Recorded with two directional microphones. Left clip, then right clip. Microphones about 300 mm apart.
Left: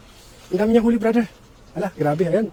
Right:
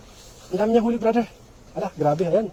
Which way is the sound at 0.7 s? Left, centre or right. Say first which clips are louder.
Left 2 dB; left.